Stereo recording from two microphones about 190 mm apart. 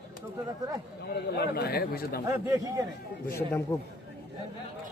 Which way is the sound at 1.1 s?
55° left (ahead or behind).